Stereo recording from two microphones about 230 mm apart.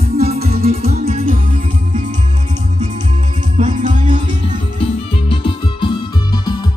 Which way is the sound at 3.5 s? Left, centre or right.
Right.